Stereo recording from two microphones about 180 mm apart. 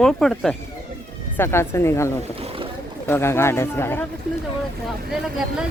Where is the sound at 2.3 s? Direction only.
30° right (ahead or behind).